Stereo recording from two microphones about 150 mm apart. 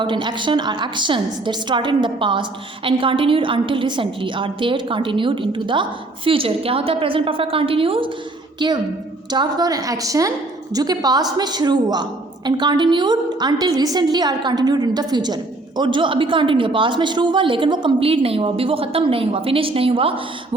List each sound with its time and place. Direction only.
0.0 s a woman's voice: 30° right (ahead or behind)